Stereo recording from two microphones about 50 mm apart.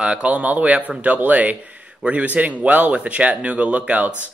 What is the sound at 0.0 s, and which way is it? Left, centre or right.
Speech, right.